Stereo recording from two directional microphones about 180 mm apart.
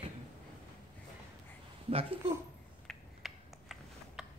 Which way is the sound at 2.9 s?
Centre (ahead or behind).